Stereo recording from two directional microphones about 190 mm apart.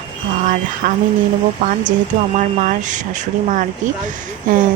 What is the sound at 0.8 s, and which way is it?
Speech, 45° right (ahead or behind).